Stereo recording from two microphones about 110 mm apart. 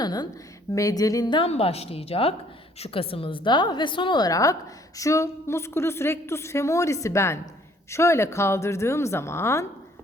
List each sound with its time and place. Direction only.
0.0 s a sound: 40° left (ahead or behind)
0.7 s speech: 30° left (ahead or behind)
1.5 s a woman's voice: 65° left (ahead or behind); by 9.6 s 25° left (ahead or behind)